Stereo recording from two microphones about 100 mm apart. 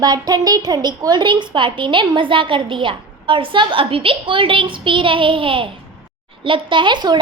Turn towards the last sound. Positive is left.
turn(degrees=-50)  # may be behind; listen again after turning